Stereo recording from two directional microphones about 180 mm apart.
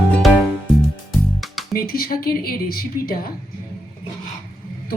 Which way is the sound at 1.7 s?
55° left (ahead or behind).